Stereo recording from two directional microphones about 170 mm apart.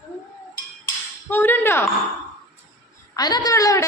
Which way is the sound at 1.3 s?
10° left (ahead or behind).